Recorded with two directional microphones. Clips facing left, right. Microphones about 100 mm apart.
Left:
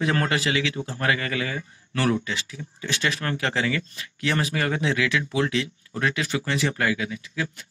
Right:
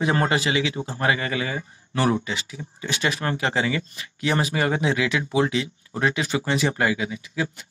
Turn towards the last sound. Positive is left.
turn(degrees=-20)  # may be behind; listen again after turning